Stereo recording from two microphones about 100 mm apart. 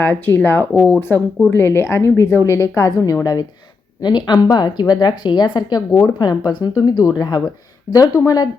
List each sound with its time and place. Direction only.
0.0 s a woman's voice: 20° left (ahead or behind)
4.0 s a woman's voice: 45° left (ahead or behind)